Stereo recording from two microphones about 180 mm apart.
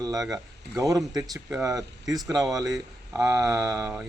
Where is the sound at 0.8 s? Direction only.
20° right (ahead or behind).